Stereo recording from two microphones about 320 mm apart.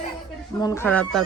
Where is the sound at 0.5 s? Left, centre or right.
Centre.